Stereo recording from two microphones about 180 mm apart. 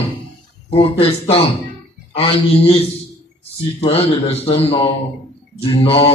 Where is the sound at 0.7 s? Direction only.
30° left (ahead or behind).